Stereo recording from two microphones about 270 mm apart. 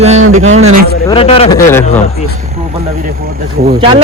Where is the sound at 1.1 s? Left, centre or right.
Left.